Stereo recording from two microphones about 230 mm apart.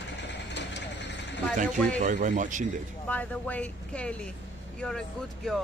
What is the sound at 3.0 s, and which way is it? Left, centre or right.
Speech, centre.